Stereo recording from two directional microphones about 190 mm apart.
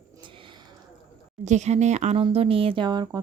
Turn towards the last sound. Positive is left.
turn(degrees=-20)  # may be behind; listen again after turning